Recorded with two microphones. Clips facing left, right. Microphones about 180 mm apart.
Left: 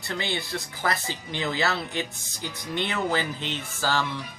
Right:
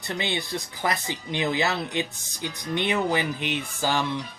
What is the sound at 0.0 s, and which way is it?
Speech, 20° right (ahead or behind).